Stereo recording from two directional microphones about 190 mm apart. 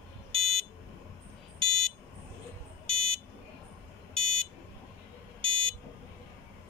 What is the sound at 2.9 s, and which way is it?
Buzzer, 30° right (ahead or behind).